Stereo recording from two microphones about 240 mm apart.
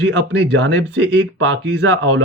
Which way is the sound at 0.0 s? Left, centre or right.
Right.